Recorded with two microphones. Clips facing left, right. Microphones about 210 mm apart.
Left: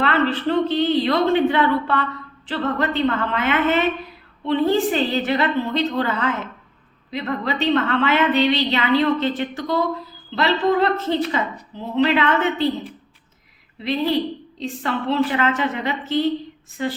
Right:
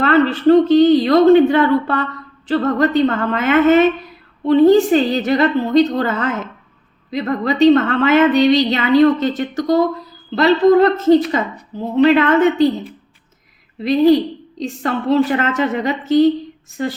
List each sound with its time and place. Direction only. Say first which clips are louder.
0.0 s a woman's voice: right 7 dB; 45° right (ahead or behind)
13.8 s a woman's voice: right 9 dB; 40° right (ahead or behind)